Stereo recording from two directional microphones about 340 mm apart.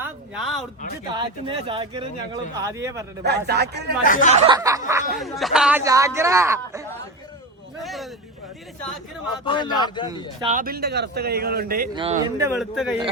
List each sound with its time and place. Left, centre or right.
0.0 s a sound: centre
1.1 s speech: centre
3.2 s a man's voice: right
4.0 s speech: left
4.4 s speech: centre
9.4 s a man's voice: centre
10.4 s a man's voice: right
11.9 s speech: centre
12.5 s speech: centre